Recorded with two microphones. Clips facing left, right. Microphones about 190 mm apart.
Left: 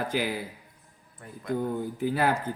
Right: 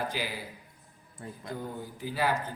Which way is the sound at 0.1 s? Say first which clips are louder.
Left 7 dB; 50° left (ahead or behind).